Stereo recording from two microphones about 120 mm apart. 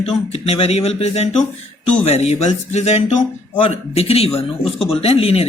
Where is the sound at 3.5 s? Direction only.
55° left (ahead or behind).